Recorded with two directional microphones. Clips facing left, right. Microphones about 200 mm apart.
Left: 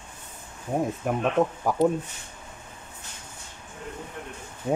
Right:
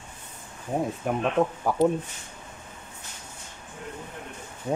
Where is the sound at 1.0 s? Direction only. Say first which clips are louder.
Even; centre (ahead or behind).